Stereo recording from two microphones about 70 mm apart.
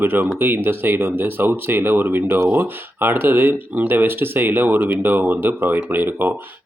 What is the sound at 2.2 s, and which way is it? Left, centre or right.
Speech, right.